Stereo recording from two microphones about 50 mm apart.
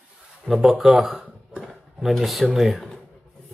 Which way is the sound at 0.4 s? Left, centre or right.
Centre.